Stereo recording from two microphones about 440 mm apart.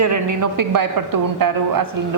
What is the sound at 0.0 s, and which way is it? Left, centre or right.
A woman's voice, right.